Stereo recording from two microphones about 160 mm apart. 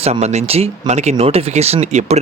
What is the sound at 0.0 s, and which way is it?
Speech, 45° right (ahead or behind).